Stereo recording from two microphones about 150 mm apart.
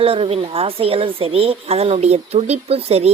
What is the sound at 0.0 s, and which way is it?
Speech, 40° right (ahead or behind).